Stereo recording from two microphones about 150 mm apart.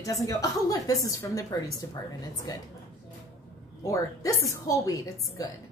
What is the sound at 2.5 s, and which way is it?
Speech, 25° left (ahead or behind).